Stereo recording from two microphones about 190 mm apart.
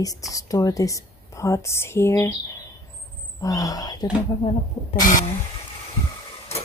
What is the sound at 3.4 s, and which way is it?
Speech, 20° left (ahead or behind).